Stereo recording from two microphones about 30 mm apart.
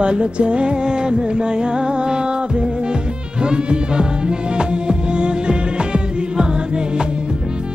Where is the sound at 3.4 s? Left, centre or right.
Right.